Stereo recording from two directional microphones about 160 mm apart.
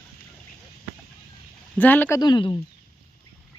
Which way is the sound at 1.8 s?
10° left (ahead or behind).